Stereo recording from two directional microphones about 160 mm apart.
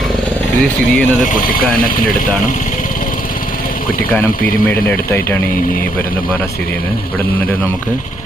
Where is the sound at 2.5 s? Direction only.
55° left (ahead or behind).